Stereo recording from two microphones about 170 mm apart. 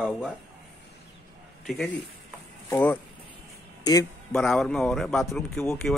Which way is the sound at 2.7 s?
15° left (ahead or behind).